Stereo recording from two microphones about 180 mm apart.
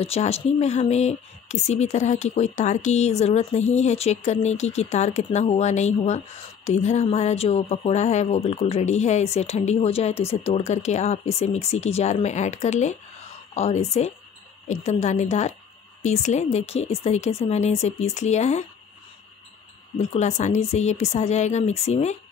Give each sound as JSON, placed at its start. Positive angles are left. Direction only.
{"t": 0.0, "sound": "speech", "side_deg": 35}
{"t": 20.0, "sound": "speech", "side_deg": 40}